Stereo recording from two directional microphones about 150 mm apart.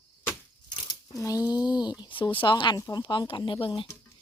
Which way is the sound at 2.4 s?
30° left (ahead or behind).